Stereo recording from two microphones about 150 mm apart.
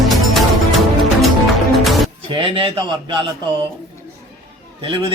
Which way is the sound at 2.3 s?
35° right (ahead or behind).